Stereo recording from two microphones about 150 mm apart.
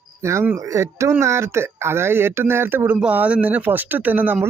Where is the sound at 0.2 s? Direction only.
20° right (ahead or behind).